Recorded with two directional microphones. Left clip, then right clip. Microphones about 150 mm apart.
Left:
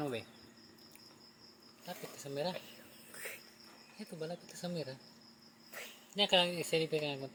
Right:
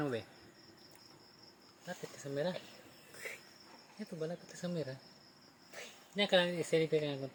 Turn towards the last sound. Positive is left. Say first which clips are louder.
# even
turn(degrees=-30)  # may be behind; listen again after turning